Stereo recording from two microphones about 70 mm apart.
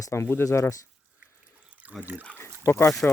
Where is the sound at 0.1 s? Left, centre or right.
Left.